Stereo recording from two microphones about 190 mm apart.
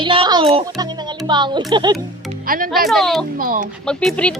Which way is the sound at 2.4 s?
50° right (ahead or behind).